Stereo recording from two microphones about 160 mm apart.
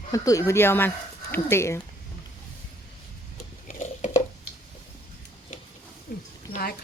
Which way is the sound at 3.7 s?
50° left (ahead or behind).